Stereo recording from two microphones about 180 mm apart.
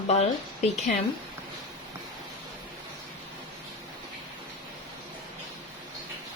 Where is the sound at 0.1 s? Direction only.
35° left (ahead or behind).